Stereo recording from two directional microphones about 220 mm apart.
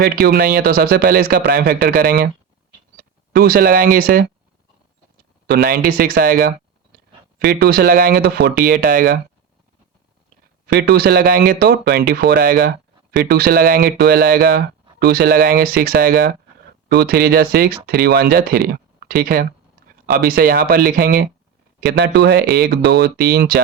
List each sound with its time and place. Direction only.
0.0 s speech: 45° right (ahead or behind)
5.5 s speech: 45° right (ahead or behind)
10.7 s speech: 45° right (ahead or behind)